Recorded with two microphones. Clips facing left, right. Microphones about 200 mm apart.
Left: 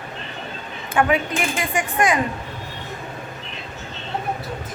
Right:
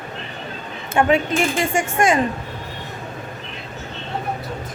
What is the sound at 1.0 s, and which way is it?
Speech, 25° right (ahead or behind).